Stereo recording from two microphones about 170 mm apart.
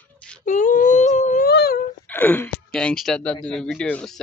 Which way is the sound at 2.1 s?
10° left (ahead or behind).